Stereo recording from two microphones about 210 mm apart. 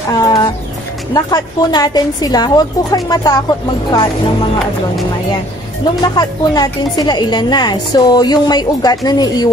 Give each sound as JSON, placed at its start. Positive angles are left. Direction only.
{"t": 0.1, "sound": "music", "side_deg": 20}
{"t": 1.1, "sound": "a woman's voice", "side_deg": 20}
{"t": 6.1, "sound": "a woman's voice", "side_deg": 20}